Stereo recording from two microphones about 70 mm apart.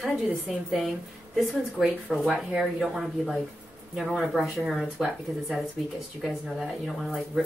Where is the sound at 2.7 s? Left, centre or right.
Centre.